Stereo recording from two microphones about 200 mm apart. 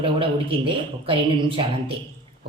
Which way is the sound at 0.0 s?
25° right (ahead or behind).